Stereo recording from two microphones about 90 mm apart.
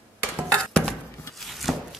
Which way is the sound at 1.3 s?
Centre (ahead or behind).